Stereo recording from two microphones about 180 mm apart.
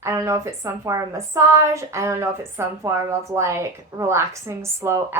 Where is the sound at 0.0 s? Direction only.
15° right (ahead or behind).